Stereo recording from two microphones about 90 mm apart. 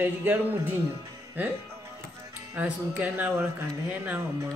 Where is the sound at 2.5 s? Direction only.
20° right (ahead or behind).